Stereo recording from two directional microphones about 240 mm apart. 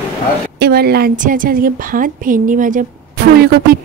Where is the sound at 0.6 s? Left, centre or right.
Right.